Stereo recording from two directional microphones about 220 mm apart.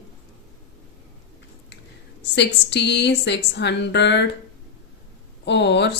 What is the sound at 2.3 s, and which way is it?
Speech, 50° left (ahead or behind).